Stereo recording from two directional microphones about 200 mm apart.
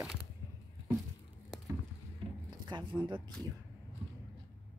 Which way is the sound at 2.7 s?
20° right (ahead or behind).